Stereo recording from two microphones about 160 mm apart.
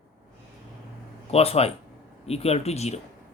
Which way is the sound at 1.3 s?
40° left (ahead or behind).